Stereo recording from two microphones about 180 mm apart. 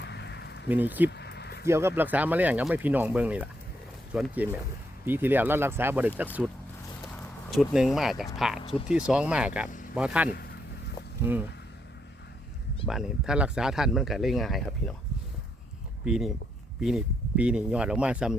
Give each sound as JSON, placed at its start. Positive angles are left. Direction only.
{"t": 0.0, "sound": "a sound", "side_deg": 70}
{"t": 0.7, "sound": "speech", "side_deg": -10}
{"t": 1.1, "sound": "a sound", "side_deg": 65}
{"t": 1.6, "sound": "speech", "side_deg": -15}
{"t": 7.0, "sound": "a sound", "side_deg": 0}
{"t": 8.9, "sound": "speech", "side_deg": -5}
{"t": 10.2, "sound": "speech", "side_deg": 60}
{"t": 11.2, "sound": "speech", "side_deg": -10}
{"t": 12.8, "sound": "speech", "side_deg": 0}
{"t": 16.0, "sound": "speech", "side_deg": -5}